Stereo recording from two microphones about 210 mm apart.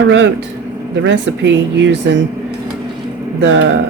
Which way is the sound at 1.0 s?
60° right (ahead or behind).